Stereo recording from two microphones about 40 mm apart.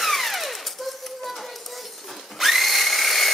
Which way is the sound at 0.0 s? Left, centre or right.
Centre.